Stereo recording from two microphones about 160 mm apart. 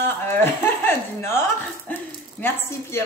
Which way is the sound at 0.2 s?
15° left (ahead or behind).